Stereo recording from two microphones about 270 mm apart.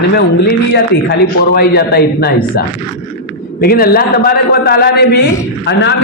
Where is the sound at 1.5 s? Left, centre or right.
Left.